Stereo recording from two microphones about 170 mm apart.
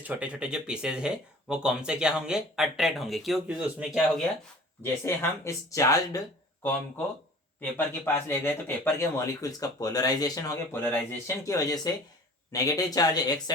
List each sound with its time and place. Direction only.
0.0 s speech: 10° right (ahead or behind)
4.8 s a man's voice: 15° left (ahead or behind)